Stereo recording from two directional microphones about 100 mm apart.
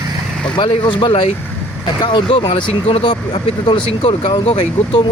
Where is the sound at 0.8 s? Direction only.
60° left (ahead or behind).